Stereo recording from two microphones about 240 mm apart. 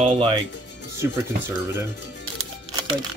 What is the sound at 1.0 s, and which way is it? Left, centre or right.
Speech, centre.